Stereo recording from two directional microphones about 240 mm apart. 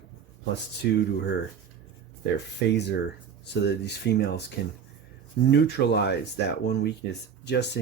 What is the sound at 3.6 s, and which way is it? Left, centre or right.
Speech, left.